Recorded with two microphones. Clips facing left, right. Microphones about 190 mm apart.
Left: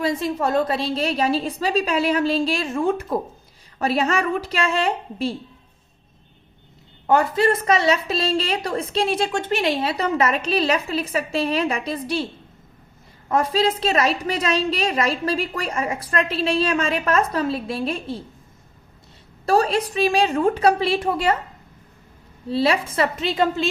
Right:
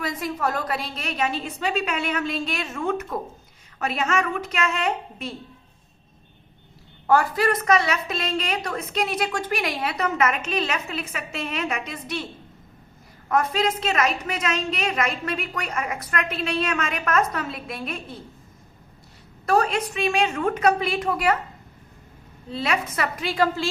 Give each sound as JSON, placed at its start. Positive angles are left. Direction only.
{"t": 0.0, "sound": "a woman's voice", "side_deg": 25}
{"t": 7.1, "sound": "a woman's voice", "side_deg": 25}
{"t": 19.5, "sound": "a woman's voice", "side_deg": 35}
{"t": 22.4, "sound": "a woman's voice", "side_deg": 35}